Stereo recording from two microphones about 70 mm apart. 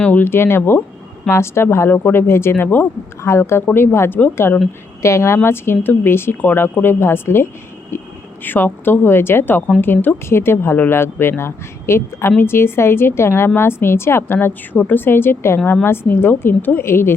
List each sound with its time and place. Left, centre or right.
0.0 s a woman's voice: left
5.0 s a woman's voice: left
8.4 s a woman's voice: left